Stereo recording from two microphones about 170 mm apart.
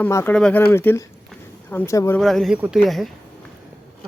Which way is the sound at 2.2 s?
Centre (ahead or behind).